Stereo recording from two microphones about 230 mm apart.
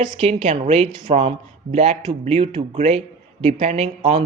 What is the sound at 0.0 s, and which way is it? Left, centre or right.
Speech, right.